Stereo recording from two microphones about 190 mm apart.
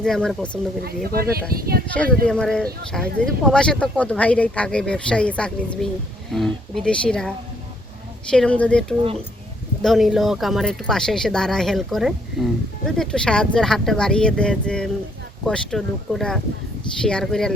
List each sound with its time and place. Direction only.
0.0 s speech: 5° left (ahead or behind)
0.9 s speech: 55° right (ahead or behind)
2.2 s speech: 5° left (ahead or behind)